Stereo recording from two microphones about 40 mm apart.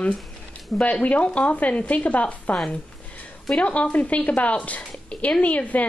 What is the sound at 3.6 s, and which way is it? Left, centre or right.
A woman's voice, left.